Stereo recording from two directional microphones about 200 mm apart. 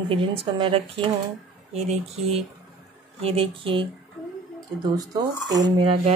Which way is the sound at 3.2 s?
25° right (ahead or behind).